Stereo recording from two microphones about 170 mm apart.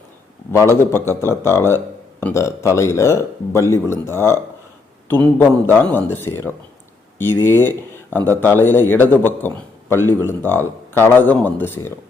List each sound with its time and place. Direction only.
0.5 s speech: 15° left (ahead or behind)